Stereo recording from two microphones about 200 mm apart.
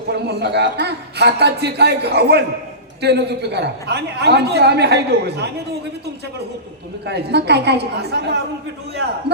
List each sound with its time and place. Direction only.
0.1 s a man's voice: 55° right (ahead or behind)
7.0 s a man's voice: 55° right (ahead or behind)